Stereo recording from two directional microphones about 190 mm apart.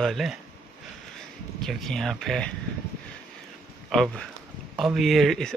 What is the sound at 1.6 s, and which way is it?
Speech, centre (ahead or behind).